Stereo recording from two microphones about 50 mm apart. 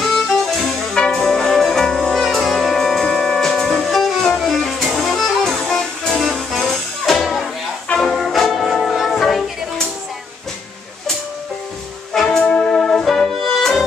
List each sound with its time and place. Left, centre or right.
0.0 s music: centre
0.9 s brass instrument: centre
2.3 s music: centre
5.7 s music: centre
6.1 s music: centre
12.2 s music: centre